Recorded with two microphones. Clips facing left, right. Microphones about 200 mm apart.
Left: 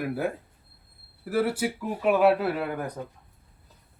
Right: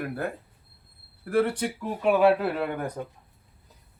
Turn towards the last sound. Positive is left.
turn(degrees=0)  # may be behind; listen again after turning